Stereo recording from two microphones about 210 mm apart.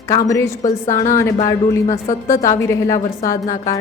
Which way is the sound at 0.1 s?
15° left (ahead or behind).